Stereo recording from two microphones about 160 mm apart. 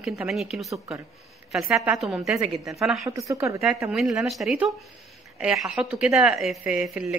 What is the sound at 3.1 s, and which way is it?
Speech, 20° right (ahead or behind).